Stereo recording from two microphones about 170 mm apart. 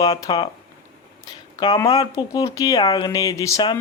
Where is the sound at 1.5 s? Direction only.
20° left (ahead or behind).